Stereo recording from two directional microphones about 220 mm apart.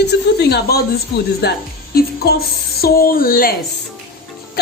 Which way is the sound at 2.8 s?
40° left (ahead or behind).